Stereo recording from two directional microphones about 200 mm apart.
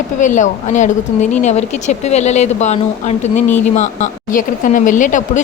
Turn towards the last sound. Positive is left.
turn(degrees=40)  # may be behind; listen again after turning